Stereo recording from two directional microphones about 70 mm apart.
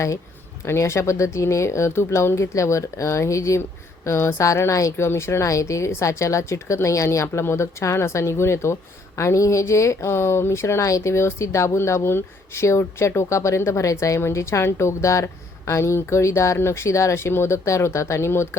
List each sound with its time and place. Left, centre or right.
0.6 s a woman's voice: left